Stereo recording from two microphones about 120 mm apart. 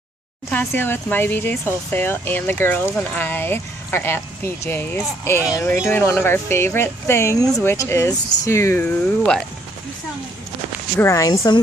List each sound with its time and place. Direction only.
0.5 s speech: 15° left (ahead or behind)
11.0 s speech: 25° left (ahead or behind)